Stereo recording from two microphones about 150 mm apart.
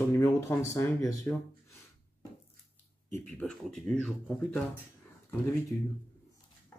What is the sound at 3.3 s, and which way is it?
Speech, 5° left (ahead or behind).